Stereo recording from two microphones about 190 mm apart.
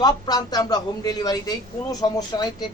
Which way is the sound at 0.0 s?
20° left (ahead or behind).